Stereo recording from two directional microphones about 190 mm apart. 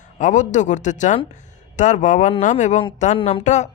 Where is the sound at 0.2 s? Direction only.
40° left (ahead or behind).